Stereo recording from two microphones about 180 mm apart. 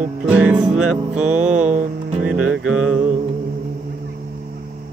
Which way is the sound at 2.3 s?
5° right (ahead or behind).